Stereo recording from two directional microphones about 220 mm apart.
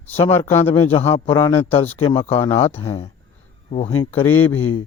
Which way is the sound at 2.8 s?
25° left (ahead or behind).